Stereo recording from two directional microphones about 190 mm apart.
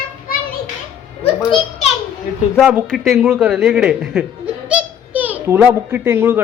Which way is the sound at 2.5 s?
Centre (ahead or behind).